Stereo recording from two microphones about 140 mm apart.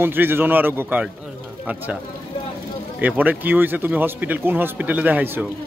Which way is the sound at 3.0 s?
10° right (ahead or behind).